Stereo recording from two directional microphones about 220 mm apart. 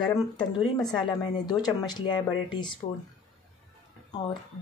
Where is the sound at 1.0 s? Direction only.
20° left (ahead or behind).